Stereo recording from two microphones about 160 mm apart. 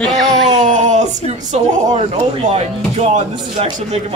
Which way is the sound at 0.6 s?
50° right (ahead or behind).